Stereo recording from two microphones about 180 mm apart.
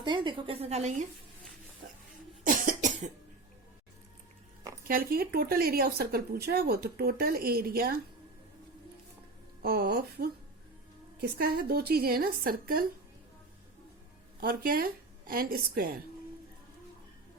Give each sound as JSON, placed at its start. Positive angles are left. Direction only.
{"t": 0.0, "sound": "speech", "side_deg": -25}
{"t": 2.4, "sound": "cough", "side_deg": -45}
{"t": 4.9, "sound": "speech", "side_deg": -55}
{"t": 9.6, "sound": "speech", "side_deg": -60}
{"t": 14.4, "sound": "speech", "side_deg": -55}